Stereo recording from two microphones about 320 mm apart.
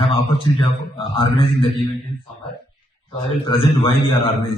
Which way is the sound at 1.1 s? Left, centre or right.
Centre.